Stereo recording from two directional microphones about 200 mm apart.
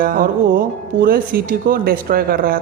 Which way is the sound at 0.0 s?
45° right (ahead or behind).